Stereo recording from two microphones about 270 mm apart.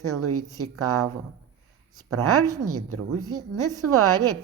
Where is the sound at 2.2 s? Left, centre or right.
Right.